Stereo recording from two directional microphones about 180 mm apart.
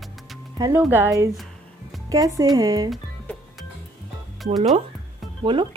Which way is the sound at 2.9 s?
Centre (ahead or behind).